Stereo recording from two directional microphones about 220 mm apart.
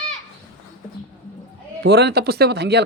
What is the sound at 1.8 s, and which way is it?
Speech, 50° right (ahead or behind).